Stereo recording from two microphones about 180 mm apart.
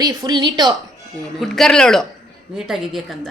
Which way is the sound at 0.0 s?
20° right (ahead or behind).